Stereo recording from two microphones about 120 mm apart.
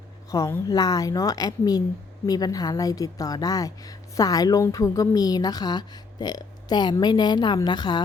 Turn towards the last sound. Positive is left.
turn(degrees=40)  # may be behind; listen again after turning